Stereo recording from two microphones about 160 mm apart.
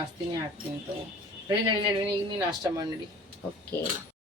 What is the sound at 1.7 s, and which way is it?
Speech, 30° right (ahead or behind).